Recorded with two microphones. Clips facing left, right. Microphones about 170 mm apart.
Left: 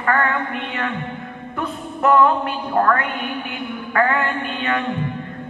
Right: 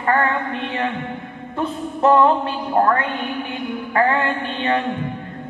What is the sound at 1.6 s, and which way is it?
Music, 30° right (ahead or behind).